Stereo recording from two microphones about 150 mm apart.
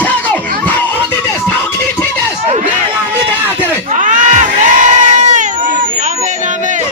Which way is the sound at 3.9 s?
60° right (ahead or behind).